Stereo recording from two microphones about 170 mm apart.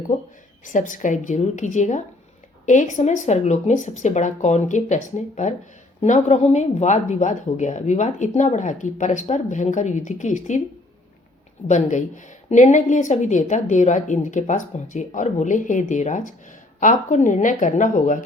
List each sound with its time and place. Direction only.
0.6 s speech: 50° left (ahead or behind)
11.7 s speech: 45° left (ahead or behind)